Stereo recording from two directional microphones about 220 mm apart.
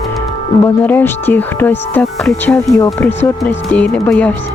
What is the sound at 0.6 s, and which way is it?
Speech, 10° left (ahead or behind).